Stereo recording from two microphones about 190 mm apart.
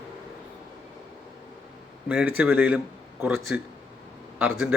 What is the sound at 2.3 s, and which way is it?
Speech, 5° right (ahead or behind).